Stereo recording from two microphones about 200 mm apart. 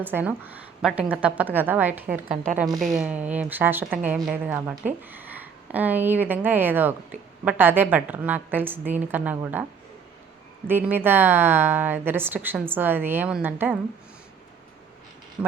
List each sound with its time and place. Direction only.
0.0 s a woman's voice: 10° right (ahead or behind)
2.3 s a woman's voice: 40° right (ahead or behind)
2.6 s a woman's voice: centre (ahead or behind)
10.7 s a woman's voice: 10° right (ahead or behind)
15.4 s speech: 5° right (ahead or behind)